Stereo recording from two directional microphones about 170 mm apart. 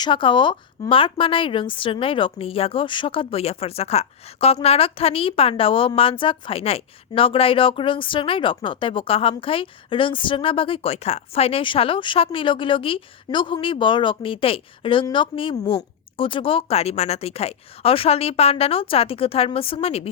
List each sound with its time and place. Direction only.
0.0 s a woman's voice: 30° left (ahead or behind)